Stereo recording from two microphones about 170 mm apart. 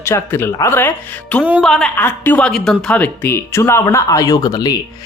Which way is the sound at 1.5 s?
5° left (ahead or behind).